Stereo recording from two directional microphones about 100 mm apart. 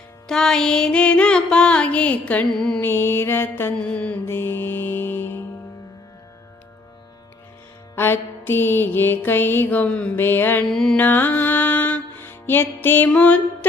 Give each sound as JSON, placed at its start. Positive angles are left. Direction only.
{"t": 0.3, "sound": "music", "side_deg": 5}
{"t": 2.8, "sound": "mantra", "side_deg": 25}
{"t": 3.8, "sound": "music", "side_deg": 10}
{"t": 7.9, "sound": "mantra", "side_deg": 20}
{"t": 10.7, "sound": "mantra", "side_deg": 5}
{"t": 10.9, "sound": "music", "side_deg": 15}